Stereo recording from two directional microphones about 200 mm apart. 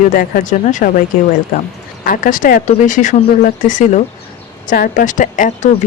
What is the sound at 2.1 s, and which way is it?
Speech, 40° left (ahead or behind).